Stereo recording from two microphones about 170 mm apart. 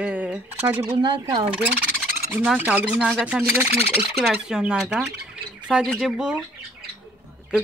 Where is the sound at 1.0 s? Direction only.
30° right (ahead or behind).